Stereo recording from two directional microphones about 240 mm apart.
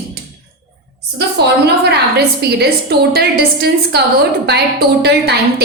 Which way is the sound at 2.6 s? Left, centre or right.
Right.